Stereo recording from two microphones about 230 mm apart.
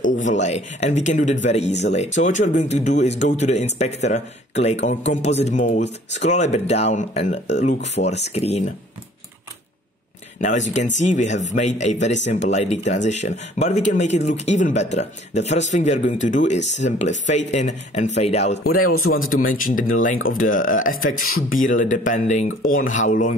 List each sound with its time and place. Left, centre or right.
0.1 s speech: left
10.4 s speech: left
20.9 s a man's voice: left
21.4 s speech: left